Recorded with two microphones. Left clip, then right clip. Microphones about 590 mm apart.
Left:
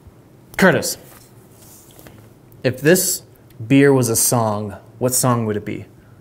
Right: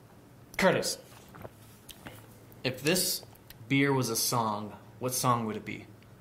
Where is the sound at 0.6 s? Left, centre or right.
Left.